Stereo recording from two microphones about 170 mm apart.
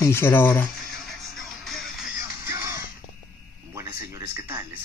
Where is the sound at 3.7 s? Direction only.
15° right (ahead or behind).